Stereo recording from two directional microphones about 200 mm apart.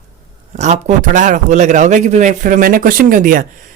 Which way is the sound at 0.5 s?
35° right (ahead or behind).